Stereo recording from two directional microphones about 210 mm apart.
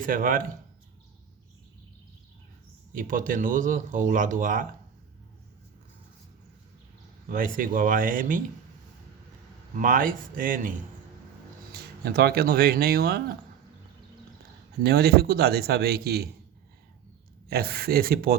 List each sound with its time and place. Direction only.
0.0 s speech: 40° right (ahead or behind)
2.9 s speech: 40° right (ahead or behind)
7.3 s speech: 40° right (ahead or behind)
9.7 s speech: 40° right (ahead or behind)
14.8 s speech: 50° right (ahead or behind)
17.5 s speech: 45° right (ahead or behind)